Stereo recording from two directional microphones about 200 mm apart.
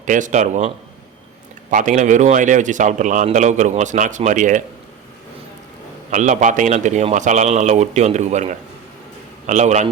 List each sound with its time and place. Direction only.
0.0 s a man's voice: 40° right (ahead or behind)
1.7 s a man's voice: 40° right (ahead or behind)
6.1 s a man's voice: 40° right (ahead or behind)